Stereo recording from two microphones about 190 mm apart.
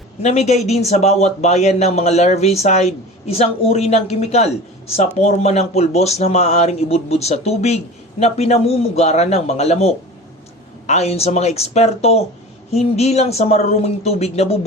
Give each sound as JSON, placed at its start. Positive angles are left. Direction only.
{"t": 0.2, "sound": "a man's voice", "side_deg": 35}